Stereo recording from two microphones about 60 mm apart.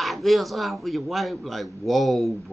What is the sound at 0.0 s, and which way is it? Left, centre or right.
Speech, centre.